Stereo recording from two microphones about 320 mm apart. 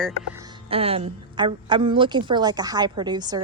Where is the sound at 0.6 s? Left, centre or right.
Centre.